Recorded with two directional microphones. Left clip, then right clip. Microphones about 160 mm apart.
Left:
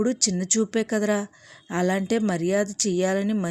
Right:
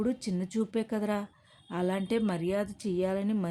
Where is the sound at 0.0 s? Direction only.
30° left (ahead or behind).